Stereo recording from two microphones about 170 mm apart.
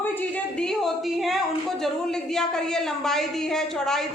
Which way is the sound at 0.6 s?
Centre (ahead or behind).